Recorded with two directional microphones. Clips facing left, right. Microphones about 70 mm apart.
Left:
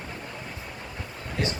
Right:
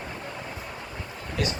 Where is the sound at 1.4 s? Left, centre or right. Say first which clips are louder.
Even; left.